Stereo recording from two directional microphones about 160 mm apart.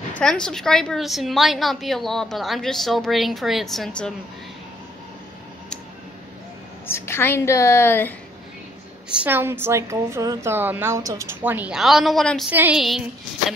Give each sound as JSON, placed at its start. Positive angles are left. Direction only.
{"t": 0.2, "sound": "a woman's voice", "side_deg": 5}
{"t": 6.9, "sound": "a woman's voice", "side_deg": 15}
{"t": 9.2, "sound": "a woman's voice", "side_deg": -15}
{"t": 12.4, "sound": "a woman's voice", "side_deg": -10}